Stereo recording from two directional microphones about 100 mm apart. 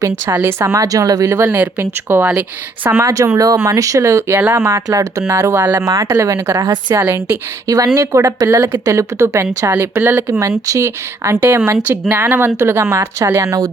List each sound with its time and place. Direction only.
0.0 s speech: 35° right (ahead or behind)
1.5 s speech: 20° right (ahead or behind)
3.3 s speech: 35° right (ahead or behind)